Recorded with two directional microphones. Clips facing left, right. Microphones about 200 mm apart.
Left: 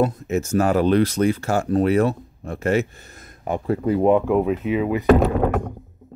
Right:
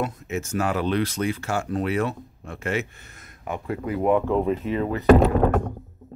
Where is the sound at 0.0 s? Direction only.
40° left (ahead or behind).